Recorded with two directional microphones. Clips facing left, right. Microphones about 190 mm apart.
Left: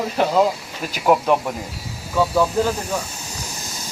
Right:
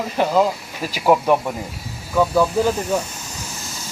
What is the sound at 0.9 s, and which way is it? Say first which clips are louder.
Speech: right 1 dB; 5° right (ahead or behind).